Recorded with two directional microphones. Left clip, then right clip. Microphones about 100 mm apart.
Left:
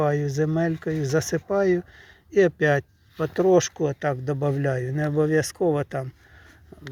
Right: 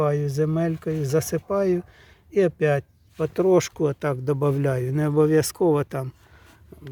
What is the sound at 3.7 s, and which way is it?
Speech, 45° right (ahead or behind).